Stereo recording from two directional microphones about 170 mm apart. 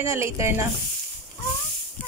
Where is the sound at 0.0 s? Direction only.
15° right (ahead or behind).